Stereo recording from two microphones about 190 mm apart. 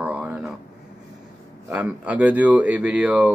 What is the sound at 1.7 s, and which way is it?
Speech, 5° right (ahead or behind).